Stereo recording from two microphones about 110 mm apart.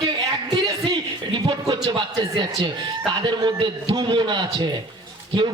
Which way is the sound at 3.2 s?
45° right (ahead or behind).